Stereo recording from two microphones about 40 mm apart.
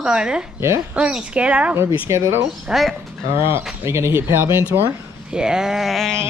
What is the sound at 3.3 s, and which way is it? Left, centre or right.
Music, right.